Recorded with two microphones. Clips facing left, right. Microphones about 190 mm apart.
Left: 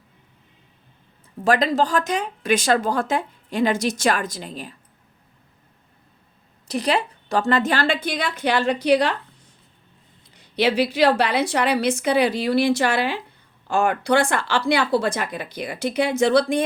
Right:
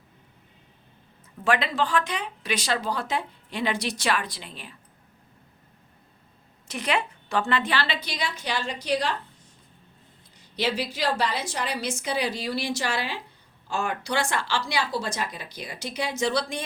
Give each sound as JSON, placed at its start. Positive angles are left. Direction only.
{"t": 1.5, "sound": "speech", "side_deg": 40}
{"t": 6.7, "sound": "speech", "side_deg": 35}
{"t": 10.5, "sound": "speech", "side_deg": 65}